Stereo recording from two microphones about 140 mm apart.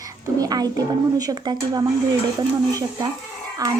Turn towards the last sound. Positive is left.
turn(degrees=-25)  # may be behind; listen again after turning